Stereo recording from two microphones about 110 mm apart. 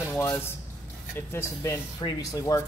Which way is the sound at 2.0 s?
45° left (ahead or behind).